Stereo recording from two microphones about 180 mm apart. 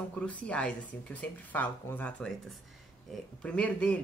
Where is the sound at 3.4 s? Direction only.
5° left (ahead or behind).